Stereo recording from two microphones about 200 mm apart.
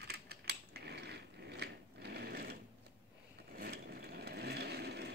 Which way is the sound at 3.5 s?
50° right (ahead or behind).